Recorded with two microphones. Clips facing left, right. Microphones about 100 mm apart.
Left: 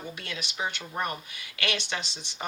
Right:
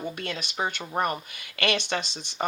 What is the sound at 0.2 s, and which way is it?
Speech, 50° right (ahead or behind).